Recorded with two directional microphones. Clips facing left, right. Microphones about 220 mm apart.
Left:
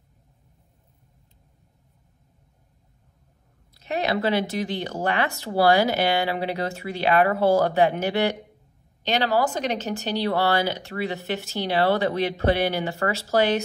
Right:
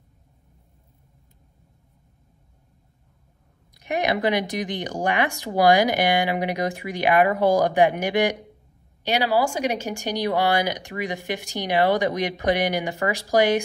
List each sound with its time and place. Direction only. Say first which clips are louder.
3.7 s speech: right 1 dB; 15° right (ahead or behind)